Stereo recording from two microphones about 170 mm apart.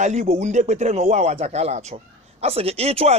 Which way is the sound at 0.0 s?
45° right (ahead or behind).